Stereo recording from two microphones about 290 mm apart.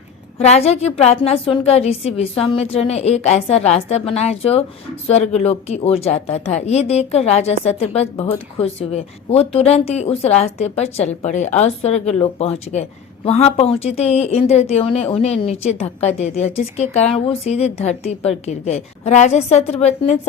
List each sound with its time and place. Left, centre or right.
0.3 s speech: left